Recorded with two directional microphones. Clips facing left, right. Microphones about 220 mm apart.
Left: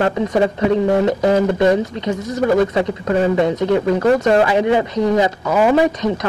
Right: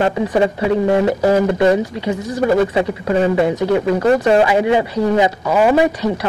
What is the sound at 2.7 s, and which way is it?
Speech, 15° right (ahead or behind).